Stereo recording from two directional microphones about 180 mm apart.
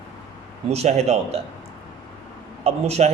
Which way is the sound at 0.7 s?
35° right (ahead or behind).